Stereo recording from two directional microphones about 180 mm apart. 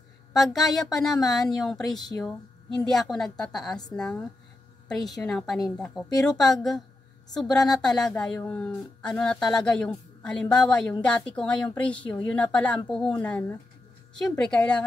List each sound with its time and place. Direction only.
0.3 s speech: centre (ahead or behind)
12.0 s a woman's voice: 25° left (ahead or behind)
12.4 s a woman's voice: 10° left (ahead or behind)